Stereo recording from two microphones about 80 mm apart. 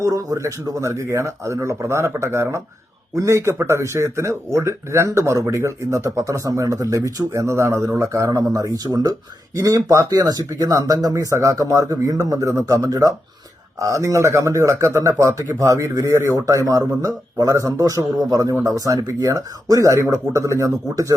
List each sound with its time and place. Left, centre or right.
0.0 s speech: right
8.5 s speech: right